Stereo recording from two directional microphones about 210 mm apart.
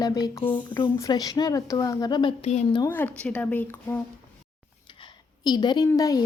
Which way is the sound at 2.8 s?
10° left (ahead or behind).